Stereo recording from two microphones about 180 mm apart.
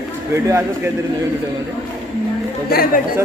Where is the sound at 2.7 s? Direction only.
55° left (ahead or behind).